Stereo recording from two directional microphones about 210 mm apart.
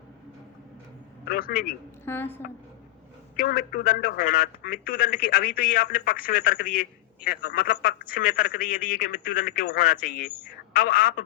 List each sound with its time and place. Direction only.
1.2 s a man's voice: 45° left (ahead or behind)
2.0 s a woman's voice: 10° left (ahead or behind)
3.3 s a man's voice: 45° left (ahead or behind)